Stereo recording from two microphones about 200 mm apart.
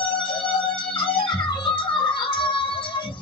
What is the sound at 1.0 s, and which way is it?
Music, 25° left (ahead or behind).